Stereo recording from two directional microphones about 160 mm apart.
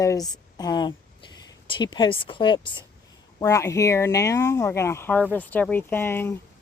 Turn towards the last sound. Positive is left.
turn(degrees=15)  # may be behind; listen again after turning